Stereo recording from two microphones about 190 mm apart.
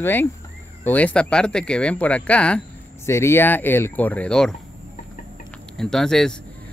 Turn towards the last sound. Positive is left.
turn(degrees=5)  # may be behind; listen again after turning